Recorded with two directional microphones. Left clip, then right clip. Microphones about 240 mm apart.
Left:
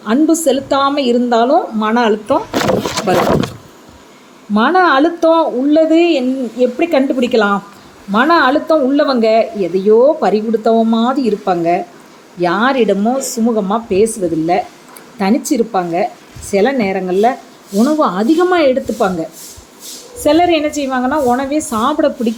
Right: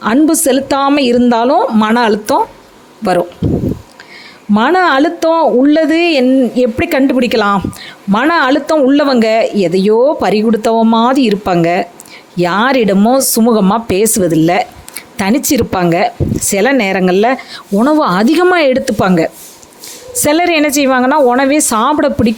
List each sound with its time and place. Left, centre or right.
0.0 s speech: right
4.5 s speech: right